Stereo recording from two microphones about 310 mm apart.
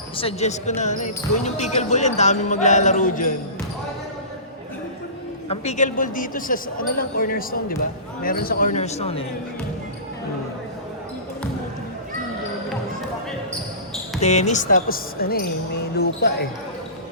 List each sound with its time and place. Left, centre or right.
0.2 s speech: centre
5.5 s speech: left
14.2 s speech: left